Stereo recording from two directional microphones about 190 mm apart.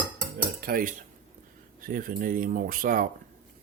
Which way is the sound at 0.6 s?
50° right (ahead or behind).